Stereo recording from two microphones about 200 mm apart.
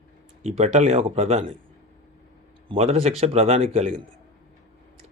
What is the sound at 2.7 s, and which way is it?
Speech, 30° right (ahead or behind).